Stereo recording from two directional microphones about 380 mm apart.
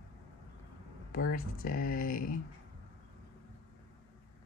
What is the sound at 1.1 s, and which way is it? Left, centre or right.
Speech, left.